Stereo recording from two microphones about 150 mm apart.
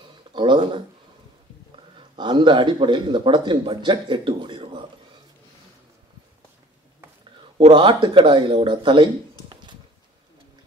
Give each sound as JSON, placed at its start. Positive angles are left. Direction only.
{"t": 0.3, "sound": "a sound", "side_deg": -30}
{"t": 2.0, "sound": "speech", "side_deg": -30}
{"t": 7.5, "sound": "speech", "side_deg": -35}